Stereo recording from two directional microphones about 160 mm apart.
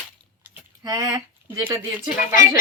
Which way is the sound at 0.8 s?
20° right (ahead or behind).